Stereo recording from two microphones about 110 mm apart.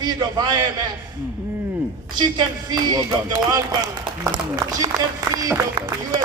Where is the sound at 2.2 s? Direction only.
40° right (ahead or behind).